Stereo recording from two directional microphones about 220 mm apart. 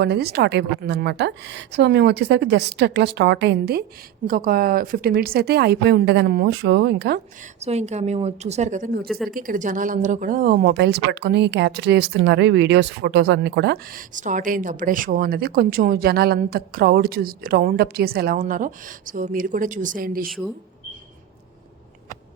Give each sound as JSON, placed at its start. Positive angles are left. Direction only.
{"t": 0.0, "sound": "speech", "side_deg": -45}
{"t": 7.6, "sound": "a woman's voice", "side_deg": -30}
{"t": 9.0, "sound": "speech", "side_deg": 0}
{"t": 9.3, "sound": "speech", "side_deg": -40}